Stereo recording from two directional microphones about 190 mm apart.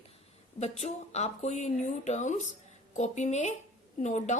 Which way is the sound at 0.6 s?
35° left (ahead or behind).